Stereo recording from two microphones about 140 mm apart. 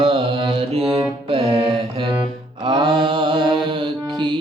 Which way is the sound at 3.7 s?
35° right (ahead or behind).